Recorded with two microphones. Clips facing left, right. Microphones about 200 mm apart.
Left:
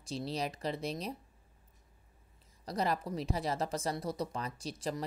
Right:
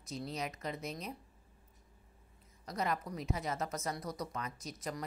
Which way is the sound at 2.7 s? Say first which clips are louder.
Left 3 dB; 35° left (ahead or behind).